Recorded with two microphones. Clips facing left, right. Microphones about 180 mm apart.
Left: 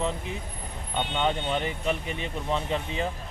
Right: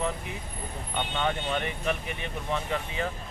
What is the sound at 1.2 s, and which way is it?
Speech, 20° left (ahead or behind).